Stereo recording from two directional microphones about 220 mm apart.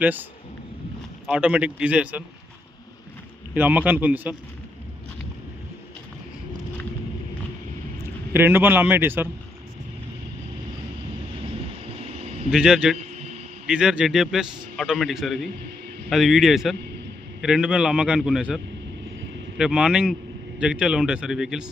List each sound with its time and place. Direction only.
0.0 s a man's voice: 10° right (ahead or behind)
1.3 s a man's voice: 5° right (ahead or behind)
3.5 s a man's voice: 5° right (ahead or behind)
8.3 s a man's voice: 10° right (ahead or behind)
11.9 s a sound: 25° right (ahead or behind)
12.5 s a man's voice: 5° right (ahead or behind)